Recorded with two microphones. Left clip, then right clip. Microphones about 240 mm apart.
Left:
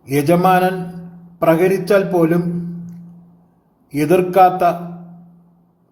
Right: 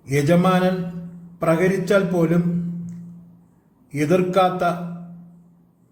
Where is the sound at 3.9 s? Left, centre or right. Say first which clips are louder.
Left 5 dB; centre.